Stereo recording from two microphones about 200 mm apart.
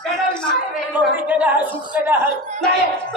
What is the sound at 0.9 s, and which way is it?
Speech, 5° right (ahead or behind).